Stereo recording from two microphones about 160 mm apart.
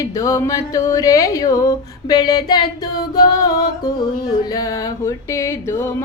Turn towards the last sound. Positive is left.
turn(degrees=15)  # may be behind; listen again after turning